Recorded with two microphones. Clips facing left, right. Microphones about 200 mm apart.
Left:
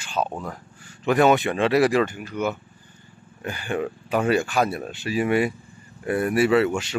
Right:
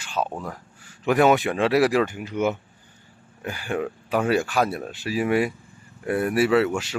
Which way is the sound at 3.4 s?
5° right (ahead or behind).